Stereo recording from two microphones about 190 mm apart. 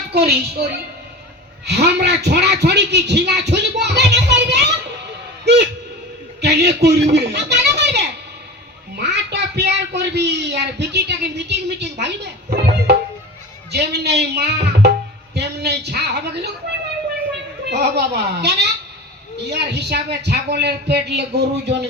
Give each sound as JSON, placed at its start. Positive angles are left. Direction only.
{"t": 0.1, "sound": "speech", "side_deg": -60}
{"t": 6.4, "sound": "speech", "side_deg": -60}
{"t": 9.0, "sound": "speech", "side_deg": -60}
{"t": 17.7, "sound": "speech", "side_deg": -60}